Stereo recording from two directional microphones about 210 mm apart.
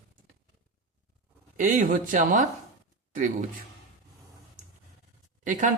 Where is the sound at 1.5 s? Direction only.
40° right (ahead or behind).